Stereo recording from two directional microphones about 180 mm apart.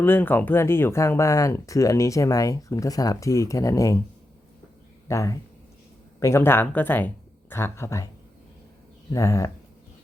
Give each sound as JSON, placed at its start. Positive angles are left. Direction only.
{"t": 0.0, "sound": "speech", "side_deg": 10}
{"t": 5.0, "sound": "speech", "side_deg": 15}
{"t": 9.1, "sound": "speech", "side_deg": 15}